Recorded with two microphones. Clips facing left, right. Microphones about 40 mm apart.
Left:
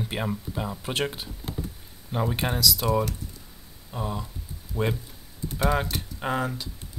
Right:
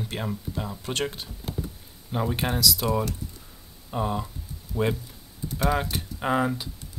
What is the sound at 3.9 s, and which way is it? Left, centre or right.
Speech, centre.